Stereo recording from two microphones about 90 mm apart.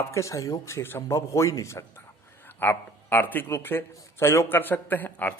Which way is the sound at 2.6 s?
25° left (ahead or behind).